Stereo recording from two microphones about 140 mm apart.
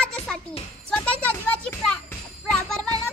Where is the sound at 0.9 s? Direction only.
10° left (ahead or behind).